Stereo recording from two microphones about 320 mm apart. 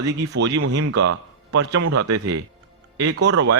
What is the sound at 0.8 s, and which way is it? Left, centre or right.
A man's voice, right.